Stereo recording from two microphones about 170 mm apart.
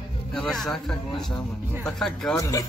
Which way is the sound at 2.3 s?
20° left (ahead or behind).